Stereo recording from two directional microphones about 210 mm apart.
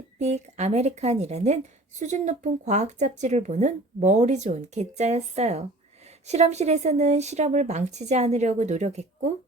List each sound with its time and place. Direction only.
0.2 s speech: 30° right (ahead or behind)